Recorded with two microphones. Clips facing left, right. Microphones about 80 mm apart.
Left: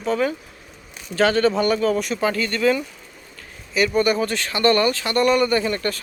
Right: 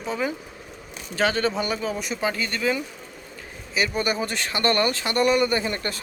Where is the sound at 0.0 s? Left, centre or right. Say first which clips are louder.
Left 5 dB; centre.